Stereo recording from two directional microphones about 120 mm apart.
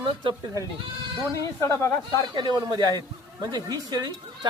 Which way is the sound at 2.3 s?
40° right (ahead or behind).